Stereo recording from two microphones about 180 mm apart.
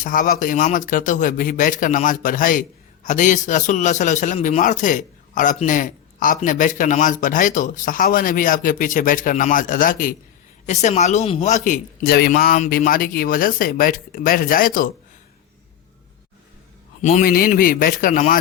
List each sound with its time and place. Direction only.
0.0 s speech: 50° left (ahead or behind)
17.0 s speech: 45° left (ahead or behind)